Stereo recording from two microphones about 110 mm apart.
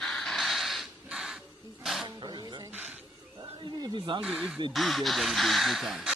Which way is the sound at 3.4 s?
45° right (ahead or behind).